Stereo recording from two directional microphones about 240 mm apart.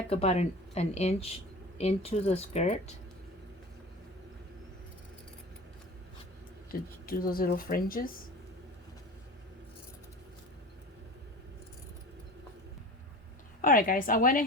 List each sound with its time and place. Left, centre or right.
0.1 s speech: left
6.7 s speech: left
13.6 s speech: left